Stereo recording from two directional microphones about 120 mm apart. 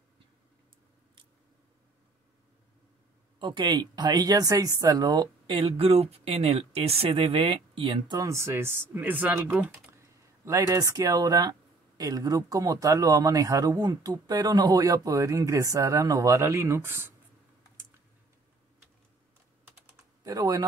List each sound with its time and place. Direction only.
3.3 s speech: 40° right (ahead or behind)
8.2 s speech: 25° right (ahead or behind)
10.4 s speech: 25° right (ahead or behind)
20.2 s speech: 30° right (ahead or behind)